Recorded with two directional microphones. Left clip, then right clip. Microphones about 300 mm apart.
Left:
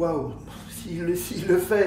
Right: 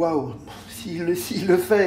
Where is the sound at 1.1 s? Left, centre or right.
Right.